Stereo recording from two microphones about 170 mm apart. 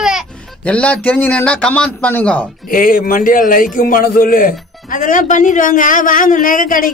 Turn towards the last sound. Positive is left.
turn(degrees=55)  # may be behind; listen again after turning